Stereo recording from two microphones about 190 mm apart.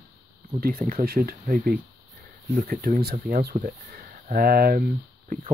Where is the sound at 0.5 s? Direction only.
45° right (ahead or behind).